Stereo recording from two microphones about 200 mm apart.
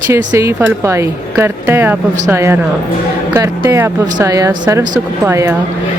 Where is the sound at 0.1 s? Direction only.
15° right (ahead or behind).